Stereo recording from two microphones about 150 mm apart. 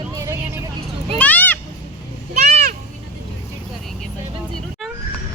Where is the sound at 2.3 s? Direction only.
45° right (ahead or behind).